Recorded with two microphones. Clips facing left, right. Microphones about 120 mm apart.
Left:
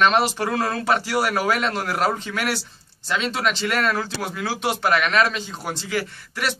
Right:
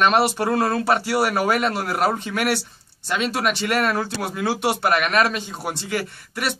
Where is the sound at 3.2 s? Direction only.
10° right (ahead or behind).